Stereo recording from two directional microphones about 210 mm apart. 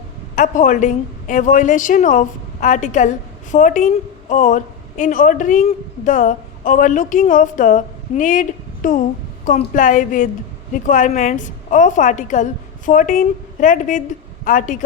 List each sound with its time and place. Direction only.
0.3 s a woman's voice: 40° left (ahead or behind)